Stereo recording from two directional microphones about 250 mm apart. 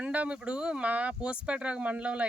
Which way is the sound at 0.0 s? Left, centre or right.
Centre.